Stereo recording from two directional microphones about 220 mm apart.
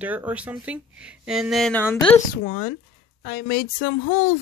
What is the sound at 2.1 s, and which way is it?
Speech, 40° left (ahead or behind).